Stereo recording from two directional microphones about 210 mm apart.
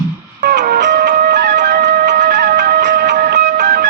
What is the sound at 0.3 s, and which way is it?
Music, 40° right (ahead or behind).